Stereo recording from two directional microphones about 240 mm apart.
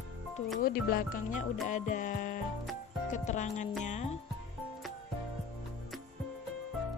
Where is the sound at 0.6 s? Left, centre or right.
Left.